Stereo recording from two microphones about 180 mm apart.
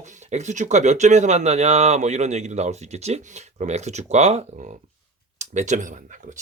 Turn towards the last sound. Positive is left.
turn(degrees=-45)  # may be behind; listen again after turning